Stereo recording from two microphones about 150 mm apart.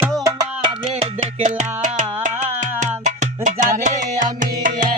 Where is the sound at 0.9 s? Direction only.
50° right (ahead or behind).